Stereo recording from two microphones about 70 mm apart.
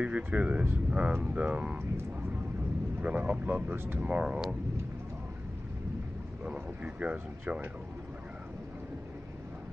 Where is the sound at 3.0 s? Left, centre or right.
Right.